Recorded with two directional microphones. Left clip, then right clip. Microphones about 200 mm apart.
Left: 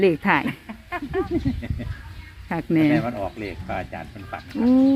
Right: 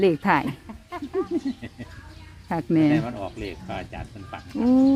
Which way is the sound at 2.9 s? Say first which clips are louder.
Left 3 dB; 25° left (ahead or behind).